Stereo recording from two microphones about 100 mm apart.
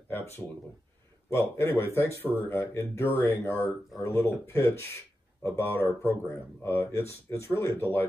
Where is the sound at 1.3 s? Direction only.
25° left (ahead or behind).